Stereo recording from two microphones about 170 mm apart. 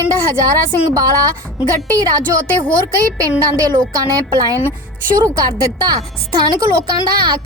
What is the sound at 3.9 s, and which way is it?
Speech, 20° right (ahead or behind).